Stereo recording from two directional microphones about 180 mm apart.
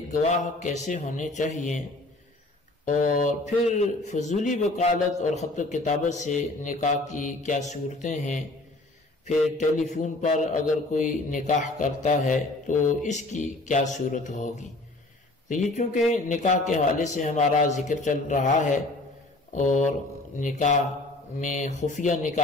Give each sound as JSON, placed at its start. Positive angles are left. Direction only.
{"t": 0.1, "sound": "a man's voice", "side_deg": 40}
{"t": 2.8, "sound": "a man's voice", "side_deg": 45}
{"t": 9.6, "sound": "a man's voice", "side_deg": 45}